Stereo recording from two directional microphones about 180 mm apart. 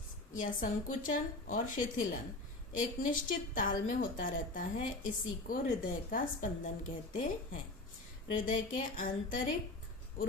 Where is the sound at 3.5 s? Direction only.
50° left (ahead or behind).